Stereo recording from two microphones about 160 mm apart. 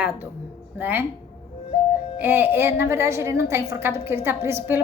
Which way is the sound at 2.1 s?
15° right (ahead or behind).